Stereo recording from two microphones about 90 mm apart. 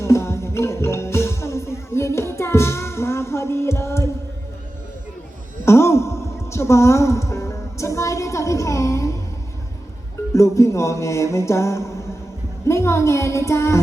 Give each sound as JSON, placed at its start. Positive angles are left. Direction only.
{"t": 0.0, "sound": "music", "side_deg": 30}
{"t": 5.6, "sound": "a sound", "side_deg": 30}
{"t": 10.3, "sound": "music", "side_deg": 35}